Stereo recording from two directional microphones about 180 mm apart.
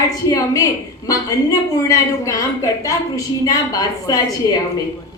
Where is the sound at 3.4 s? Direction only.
20° left (ahead or behind).